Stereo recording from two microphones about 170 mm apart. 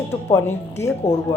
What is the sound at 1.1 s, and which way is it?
Speech, 40° left (ahead or behind).